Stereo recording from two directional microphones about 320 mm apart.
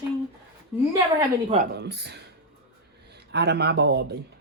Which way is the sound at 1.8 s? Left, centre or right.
Right.